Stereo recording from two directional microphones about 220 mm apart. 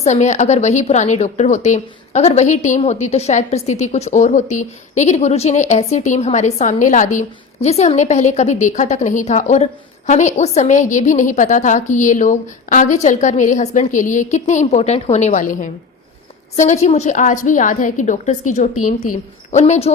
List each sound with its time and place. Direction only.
0.0 s a woman's voice: 30° left (ahead or behind)